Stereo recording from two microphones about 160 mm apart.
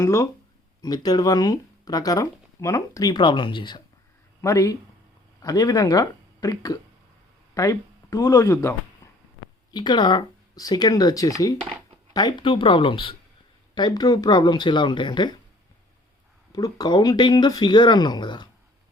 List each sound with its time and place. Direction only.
0.0 s speech: 20° left (ahead or behind)
9.0 s a sound: 20° left (ahead or behind)
9.7 s speech: 30° left (ahead or behind)
16.5 s speech: 25° left (ahead or behind)